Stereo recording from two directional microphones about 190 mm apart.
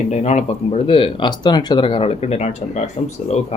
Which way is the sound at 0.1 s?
35° left (ahead or behind).